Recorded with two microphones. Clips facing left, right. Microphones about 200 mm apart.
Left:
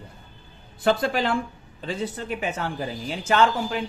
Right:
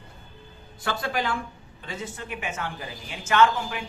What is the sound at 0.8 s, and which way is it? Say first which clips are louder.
A woman's voice: left 6 dB; 30° left (ahead or behind).